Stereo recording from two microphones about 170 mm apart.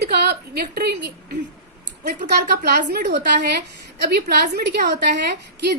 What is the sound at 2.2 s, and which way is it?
A woman's voice, 75° right (ahead or behind).